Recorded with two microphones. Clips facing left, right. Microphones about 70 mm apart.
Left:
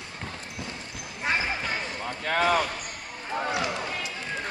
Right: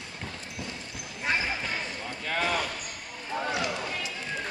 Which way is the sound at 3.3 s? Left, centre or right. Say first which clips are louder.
Left 2 dB; centre.